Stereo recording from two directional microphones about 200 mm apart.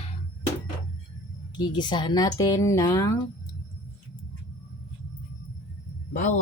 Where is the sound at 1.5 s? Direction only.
20° left (ahead or behind).